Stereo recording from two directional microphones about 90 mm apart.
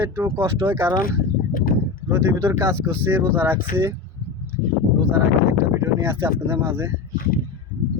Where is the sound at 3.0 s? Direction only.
25° right (ahead or behind).